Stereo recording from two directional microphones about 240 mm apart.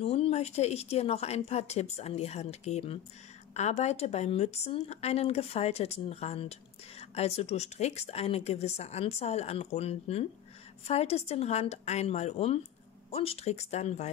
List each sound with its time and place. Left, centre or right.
0.0 s a woman's voice: left